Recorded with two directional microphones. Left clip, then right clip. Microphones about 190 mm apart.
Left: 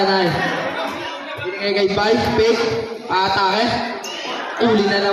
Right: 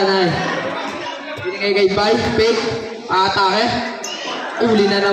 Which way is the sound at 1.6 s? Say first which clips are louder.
Right 2 dB; 15° right (ahead or behind).